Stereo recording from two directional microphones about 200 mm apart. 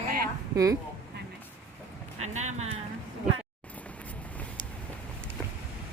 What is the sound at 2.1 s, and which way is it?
Speech, 35° right (ahead or behind).